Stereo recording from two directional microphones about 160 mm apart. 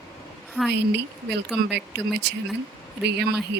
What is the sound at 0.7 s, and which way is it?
Speech, 90° right.